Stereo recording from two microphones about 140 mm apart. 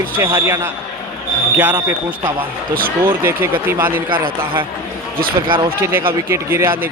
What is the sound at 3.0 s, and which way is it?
Speech, 15° right (ahead or behind).